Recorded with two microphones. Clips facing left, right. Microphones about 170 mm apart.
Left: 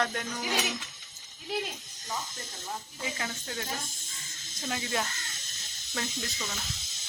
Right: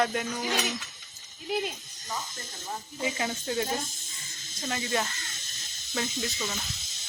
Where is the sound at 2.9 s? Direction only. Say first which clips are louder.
Right 9 dB; 20° right (ahead or behind).